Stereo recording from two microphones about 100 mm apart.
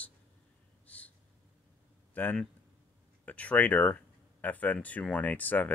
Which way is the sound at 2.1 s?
15° left (ahead or behind).